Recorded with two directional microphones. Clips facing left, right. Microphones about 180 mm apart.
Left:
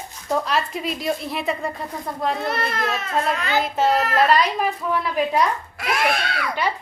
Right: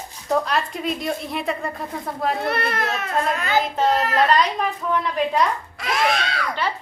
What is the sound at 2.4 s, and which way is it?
Speech, 60° right (ahead or behind).